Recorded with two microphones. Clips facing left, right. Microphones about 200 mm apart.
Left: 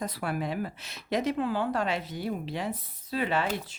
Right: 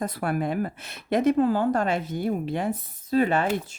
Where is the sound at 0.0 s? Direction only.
50° right (ahead or behind).